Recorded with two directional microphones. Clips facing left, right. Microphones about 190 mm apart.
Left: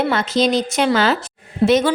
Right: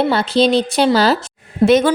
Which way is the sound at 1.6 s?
55° right (ahead or behind).